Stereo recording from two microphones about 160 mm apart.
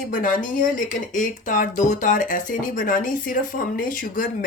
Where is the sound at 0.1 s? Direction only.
60° left (ahead or behind).